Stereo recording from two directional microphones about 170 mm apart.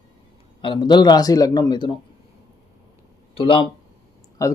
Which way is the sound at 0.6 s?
25° left (ahead or behind).